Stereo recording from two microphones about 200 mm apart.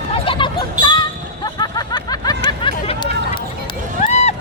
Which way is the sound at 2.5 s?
25° left (ahead or behind).